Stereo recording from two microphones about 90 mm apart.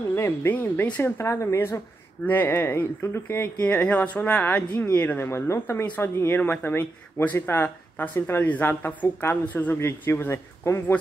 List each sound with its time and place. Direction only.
0.1 s speech: 25° left (ahead or behind)